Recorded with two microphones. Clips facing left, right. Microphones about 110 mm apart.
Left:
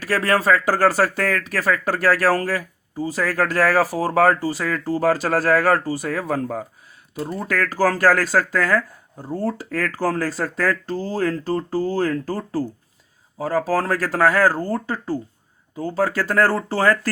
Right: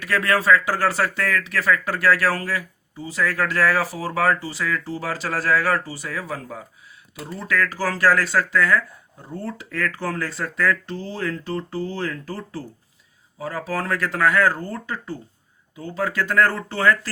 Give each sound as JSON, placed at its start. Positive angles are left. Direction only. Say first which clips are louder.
{"t": 0.0, "sound": "speech", "louder": "left 2 dB", "side_deg": 35}